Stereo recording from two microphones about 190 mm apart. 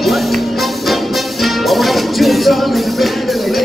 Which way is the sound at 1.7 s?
Centre (ahead or behind).